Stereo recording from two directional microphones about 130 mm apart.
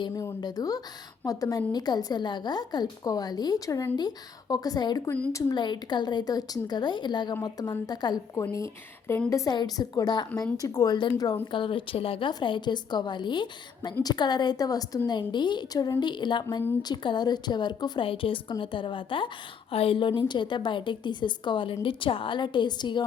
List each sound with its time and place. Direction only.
0.4 s a woman's voice: 30° left (ahead or behind)
5.5 s a woman's voice: 35° left (ahead or behind)